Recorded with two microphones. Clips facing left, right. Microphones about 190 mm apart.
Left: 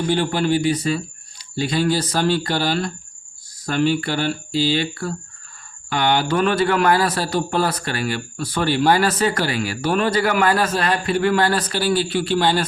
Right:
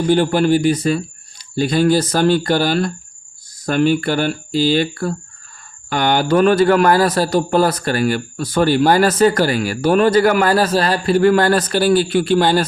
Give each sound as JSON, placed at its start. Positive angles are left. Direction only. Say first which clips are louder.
{"t": 0.1, "sound": "a man's voice", "louder": "right 6 dB", "side_deg": -45}